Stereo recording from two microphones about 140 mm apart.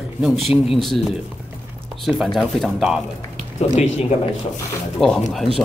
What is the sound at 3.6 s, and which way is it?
Speech, 50° left (ahead or behind).